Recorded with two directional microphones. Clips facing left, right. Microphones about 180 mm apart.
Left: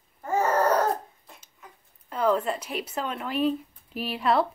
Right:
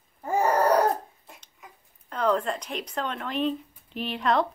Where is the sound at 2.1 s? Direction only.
5° left (ahead or behind).